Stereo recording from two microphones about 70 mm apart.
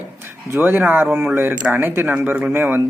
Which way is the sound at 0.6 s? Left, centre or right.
Right.